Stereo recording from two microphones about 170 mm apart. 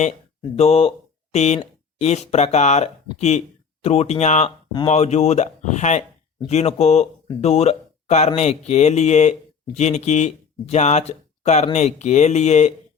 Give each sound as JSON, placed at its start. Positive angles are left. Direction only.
{"t": 0.5, "sound": "speech", "side_deg": 35}